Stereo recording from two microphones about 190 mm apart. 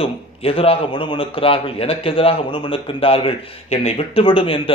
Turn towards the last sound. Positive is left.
turn(degrees=30)  # may be behind; listen again after turning